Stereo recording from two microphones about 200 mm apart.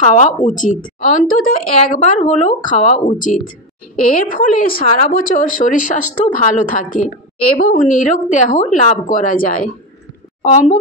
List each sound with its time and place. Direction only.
0.0 s a woman's voice: 40° left (ahead or behind)